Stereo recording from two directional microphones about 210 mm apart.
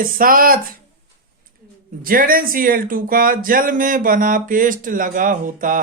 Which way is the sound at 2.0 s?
45° right (ahead or behind).